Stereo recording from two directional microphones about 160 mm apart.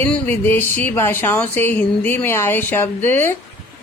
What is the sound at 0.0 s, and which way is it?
Speech, 10° left (ahead or behind).